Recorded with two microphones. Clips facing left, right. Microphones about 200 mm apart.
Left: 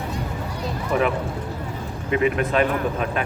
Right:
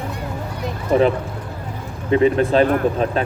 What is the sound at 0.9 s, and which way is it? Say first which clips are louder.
Speech: right 6 dB; 30° right (ahead or behind).